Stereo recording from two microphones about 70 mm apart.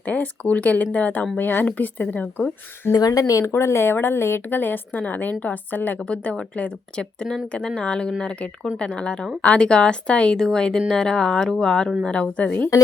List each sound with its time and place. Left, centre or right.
0.0 s a woman's voice: left
2.9 s speech: left
3.4 s a woman's voice: left